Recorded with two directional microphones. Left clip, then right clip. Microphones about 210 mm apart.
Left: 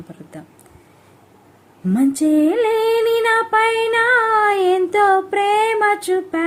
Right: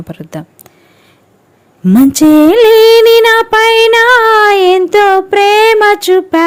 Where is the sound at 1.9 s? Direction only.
50° right (ahead or behind).